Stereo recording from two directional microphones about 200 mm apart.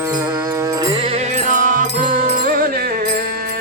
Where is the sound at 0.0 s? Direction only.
15° right (ahead or behind).